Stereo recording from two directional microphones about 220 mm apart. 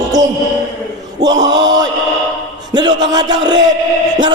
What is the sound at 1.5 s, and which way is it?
Chant, 20° right (ahead or behind).